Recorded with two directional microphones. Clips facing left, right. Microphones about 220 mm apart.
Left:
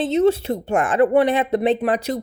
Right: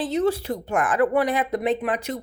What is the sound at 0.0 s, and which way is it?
A woman's voice, 25° left (ahead or behind).